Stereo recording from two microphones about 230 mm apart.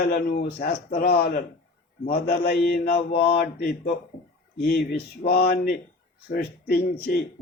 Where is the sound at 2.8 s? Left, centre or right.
Left.